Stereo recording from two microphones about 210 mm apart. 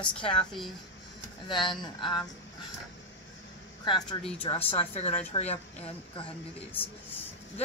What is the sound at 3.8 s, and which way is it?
Speech, 25° left (ahead or behind).